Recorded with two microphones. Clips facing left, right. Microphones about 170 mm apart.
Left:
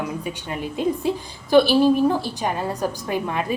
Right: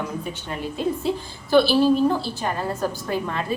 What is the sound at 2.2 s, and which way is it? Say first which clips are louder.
A woman's voice: left 1 dB; 15° left (ahead or behind).